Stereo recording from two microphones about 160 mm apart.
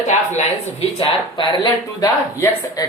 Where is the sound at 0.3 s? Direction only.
45° left (ahead or behind).